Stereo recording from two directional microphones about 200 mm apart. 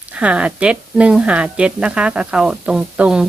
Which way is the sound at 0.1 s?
5° right (ahead or behind).